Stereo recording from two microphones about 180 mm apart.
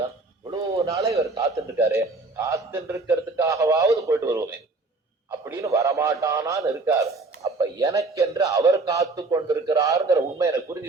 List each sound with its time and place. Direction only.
0.5 s a man's voice: 15° right (ahead or behind)
5.5 s a man's voice: 15° right (ahead or behind)